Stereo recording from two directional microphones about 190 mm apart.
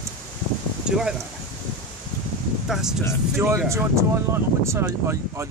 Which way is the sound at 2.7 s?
Centre (ahead or behind).